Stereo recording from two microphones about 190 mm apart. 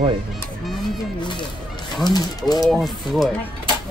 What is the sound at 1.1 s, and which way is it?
Speech, 25° left (ahead or behind).